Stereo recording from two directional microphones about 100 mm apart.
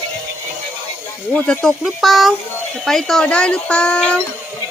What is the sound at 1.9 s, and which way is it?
Speech, centre (ahead or behind).